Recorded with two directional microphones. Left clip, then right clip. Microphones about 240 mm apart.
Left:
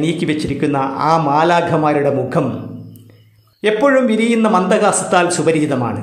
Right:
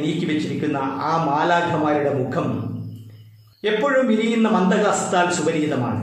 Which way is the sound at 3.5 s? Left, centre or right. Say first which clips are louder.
Left 6 dB; left.